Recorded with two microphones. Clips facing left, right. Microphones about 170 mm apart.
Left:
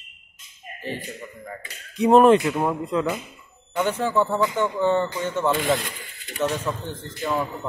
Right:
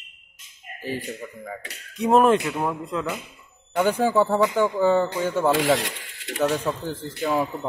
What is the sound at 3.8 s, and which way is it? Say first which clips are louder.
A man's voice: right 2 dB; 10° right (ahead or behind).